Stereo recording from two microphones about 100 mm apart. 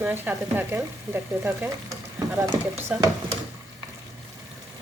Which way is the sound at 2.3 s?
30° right (ahead or behind).